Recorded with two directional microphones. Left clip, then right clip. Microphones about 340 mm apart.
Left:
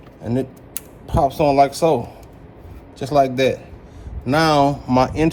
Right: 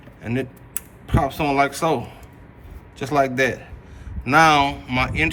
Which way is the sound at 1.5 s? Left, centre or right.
Centre.